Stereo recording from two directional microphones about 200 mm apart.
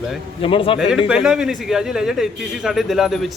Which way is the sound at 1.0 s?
5° right (ahead or behind).